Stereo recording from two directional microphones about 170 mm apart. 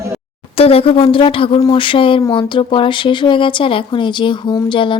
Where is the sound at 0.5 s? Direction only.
35° left (ahead or behind).